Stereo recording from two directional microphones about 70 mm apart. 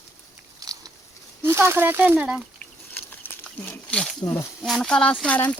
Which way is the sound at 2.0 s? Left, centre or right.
Right.